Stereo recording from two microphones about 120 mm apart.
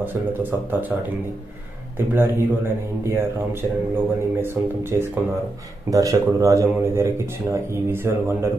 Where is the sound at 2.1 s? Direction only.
20° right (ahead or behind).